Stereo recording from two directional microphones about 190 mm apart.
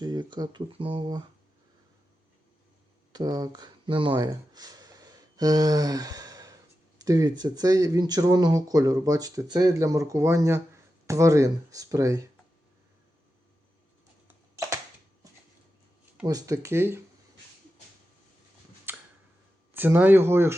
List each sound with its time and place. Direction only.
0.0 s speech: 20° right (ahead or behind)
3.1 s speech: 20° right (ahead or behind)
15.2 s a sound: 15° right (ahead or behind)
16.2 s speech: 20° right (ahead or behind)
18.9 s a sound: 10° right (ahead or behind)
19.7 s speech: 10° right (ahead or behind)